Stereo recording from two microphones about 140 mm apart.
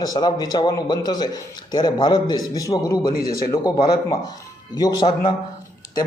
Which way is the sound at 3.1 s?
90° left.